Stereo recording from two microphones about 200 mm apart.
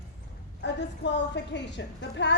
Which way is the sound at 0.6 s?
60° left (ahead or behind).